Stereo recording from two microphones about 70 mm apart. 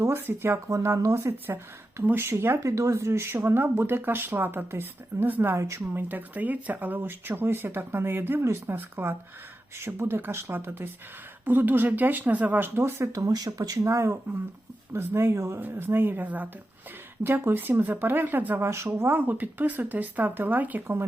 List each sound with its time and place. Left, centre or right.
0.2 s speech: right
0.7 s speech: right
2.0 s speech: right
2.6 s speech: right
2.9 s speech: right
5.5 s speech: right
5.9 s speech: right
13.2 s speech: right
13.8 s speech: right
15.7 s speech: right